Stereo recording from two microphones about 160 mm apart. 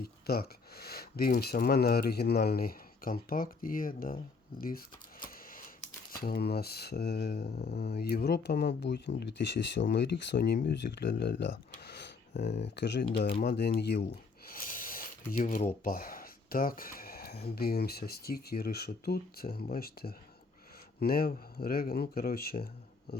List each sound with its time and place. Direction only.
0.0 s speech: 75° left (ahead or behind); by 4.2 s 60° left (ahead or behind)
5.2 s a sound: 60° left (ahead or behind)
6.1 s speech: 70° left (ahead or behind); by 7.3 s 90° left
7.5 s speech: 80° left
13.4 s speech: 75° left (ahead or behind)
14.4 s speech: 60° left (ahead or behind)